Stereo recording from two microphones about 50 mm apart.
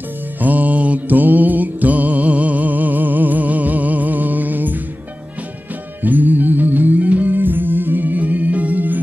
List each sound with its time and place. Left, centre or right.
0.4 s mantra: right
6.0 s music: right